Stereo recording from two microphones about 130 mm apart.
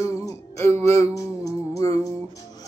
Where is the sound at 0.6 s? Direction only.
20° left (ahead or behind).